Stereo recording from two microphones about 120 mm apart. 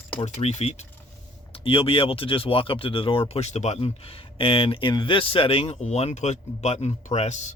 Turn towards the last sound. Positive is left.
turn(degrees=70)  # may be behind; listen again after turning